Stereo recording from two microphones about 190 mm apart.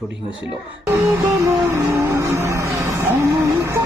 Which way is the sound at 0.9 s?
15° right (ahead or behind).